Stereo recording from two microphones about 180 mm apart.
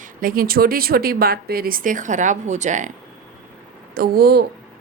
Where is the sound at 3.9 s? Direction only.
55° right (ahead or behind).